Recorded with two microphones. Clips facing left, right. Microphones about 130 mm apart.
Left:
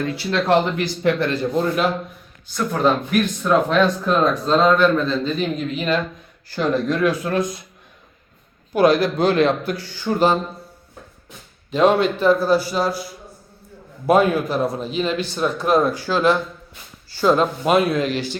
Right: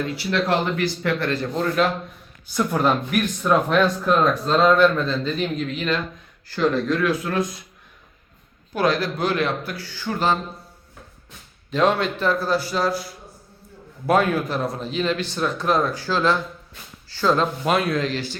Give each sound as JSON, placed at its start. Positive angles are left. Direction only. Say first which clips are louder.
{"t": 0.1, "sound": "speech", "louder": "left 7 dB", "side_deg": 25}
{"t": 2.5, "sound": "speech", "louder": "left 1 dB", "side_deg": -10}
{"t": 6.6, "sound": "speech", "louder": "left 1 dB", "side_deg": 15}
{"t": 8.7, "sound": "speech", "louder": "left 6 dB", "side_deg": 15}
{"t": 11.9, "sound": "speech", "louder": "left 6 dB", "side_deg": 5}
{"t": 14.3, "sound": "speech", "louder": "left 3 dB", "side_deg": 5}